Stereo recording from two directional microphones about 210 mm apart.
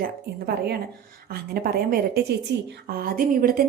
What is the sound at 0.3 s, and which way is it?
A woman's voice, 50° right (ahead or behind).